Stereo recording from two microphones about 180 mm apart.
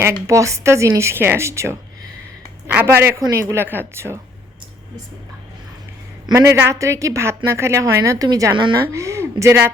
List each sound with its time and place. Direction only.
0.0 s a woman's voice: 15° right (ahead or behind)
6.2 s a woman's voice: 15° right (ahead or behind)